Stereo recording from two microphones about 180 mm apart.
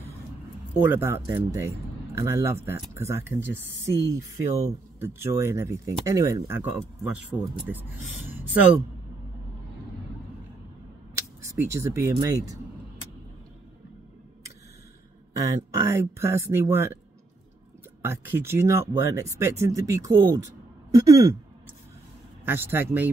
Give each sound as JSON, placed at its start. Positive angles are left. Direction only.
{"t": 0.7, "sound": "speech", "side_deg": -10}
{"t": 8.3, "sound": "a sound", "side_deg": -10}
{"t": 11.1, "sound": "speech", "side_deg": -15}
{"t": 15.7, "sound": "speech", "side_deg": -15}
{"t": 18.0, "sound": "speech", "side_deg": -10}
{"t": 20.9, "sound": "a sound", "side_deg": -20}
{"t": 22.4, "sound": "speech", "side_deg": -10}